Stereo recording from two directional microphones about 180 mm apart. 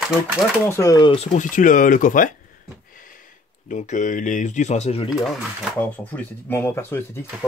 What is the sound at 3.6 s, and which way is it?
Speech, 45° left (ahead or behind).